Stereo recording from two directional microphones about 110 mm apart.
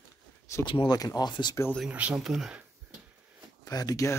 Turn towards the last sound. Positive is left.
turn(degrees=35)  # may be behind; listen again after turning